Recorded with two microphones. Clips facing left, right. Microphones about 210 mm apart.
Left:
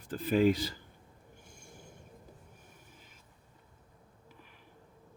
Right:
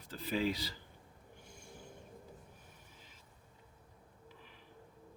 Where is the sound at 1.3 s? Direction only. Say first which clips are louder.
Right 1 dB; 45° left (ahead or behind).